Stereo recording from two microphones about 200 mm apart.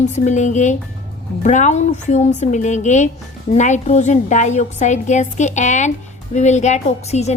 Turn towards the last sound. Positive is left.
turn(degrees=35)  # may be behind; listen again after turning